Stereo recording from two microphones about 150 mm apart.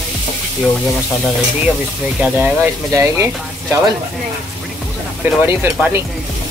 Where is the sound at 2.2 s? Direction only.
10° right (ahead or behind).